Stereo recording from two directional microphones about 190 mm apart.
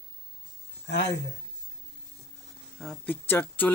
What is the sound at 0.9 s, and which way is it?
Speech, 65° left (ahead or behind).